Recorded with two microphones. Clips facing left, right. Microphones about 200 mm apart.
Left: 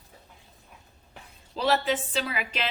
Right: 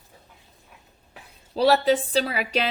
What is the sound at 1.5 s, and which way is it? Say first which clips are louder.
Speech: right 6 dB; 40° right (ahead or behind).